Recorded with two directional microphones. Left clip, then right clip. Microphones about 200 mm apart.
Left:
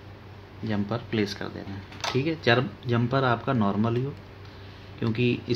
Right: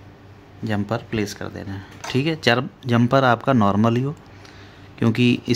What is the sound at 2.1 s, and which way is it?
Speech, 45° right (ahead or behind).